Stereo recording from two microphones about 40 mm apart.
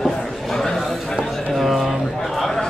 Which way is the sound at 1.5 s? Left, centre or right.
Centre.